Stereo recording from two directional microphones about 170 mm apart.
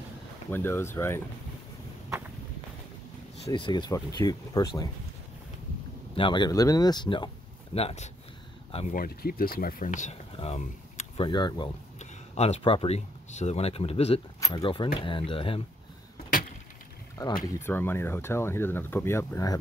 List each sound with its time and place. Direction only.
0.5 s speech: 15° left (ahead or behind)
3.4 s speech: 25° left (ahead or behind)
6.1 s speech: 30° left (ahead or behind)
7.7 s speech: 40° left (ahead or behind)
8.9 s speech: 60° left (ahead or behind)
10.3 s speech: 35° left (ahead or behind)
12.0 s speech: 40° left (ahead or behind)
14.4 s speech: 25° left (ahead or behind)
17.5 s speech: 15° left (ahead or behind)